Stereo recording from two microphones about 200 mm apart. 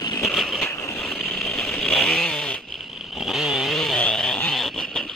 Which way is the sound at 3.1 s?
Centre (ahead or behind).